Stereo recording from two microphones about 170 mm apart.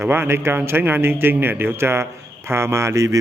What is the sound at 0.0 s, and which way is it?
A man's voice, 15° right (ahead or behind).